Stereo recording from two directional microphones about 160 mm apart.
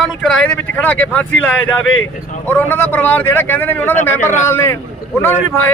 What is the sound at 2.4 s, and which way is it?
Speech, 15° left (ahead or behind).